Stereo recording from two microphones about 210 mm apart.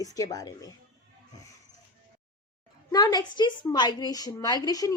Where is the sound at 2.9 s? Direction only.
20° left (ahead or behind).